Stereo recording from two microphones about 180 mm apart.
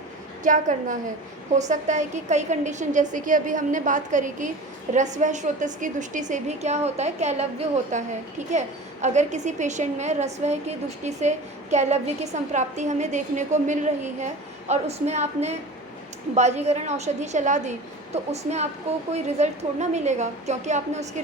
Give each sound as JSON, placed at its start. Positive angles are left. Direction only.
{"t": 0.4, "sound": "a woman's voice", "side_deg": -45}